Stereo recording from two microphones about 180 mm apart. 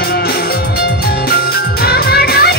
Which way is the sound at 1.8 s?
60° left (ahead or behind).